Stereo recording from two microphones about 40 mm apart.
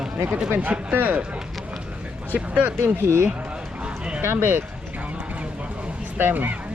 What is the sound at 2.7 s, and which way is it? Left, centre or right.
Speech, right.